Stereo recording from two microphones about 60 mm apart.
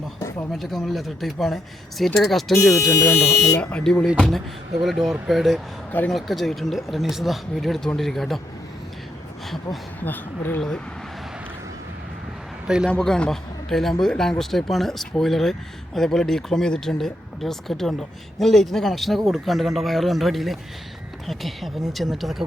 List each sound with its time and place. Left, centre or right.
0.5 s speech: centre
2.7 s speech: left
3.6 s speech: centre
4.2 s speech: centre
10.0 s speech: left
12.6 s a man's voice: centre
12.9 s speech: centre